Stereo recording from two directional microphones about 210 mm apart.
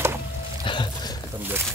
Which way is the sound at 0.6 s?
20° left (ahead or behind).